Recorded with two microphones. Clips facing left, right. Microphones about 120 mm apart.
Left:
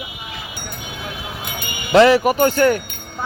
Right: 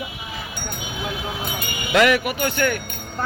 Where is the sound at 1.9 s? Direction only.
30° left (ahead or behind).